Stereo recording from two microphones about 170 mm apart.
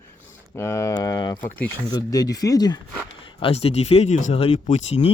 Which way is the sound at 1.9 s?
20° left (ahead or behind).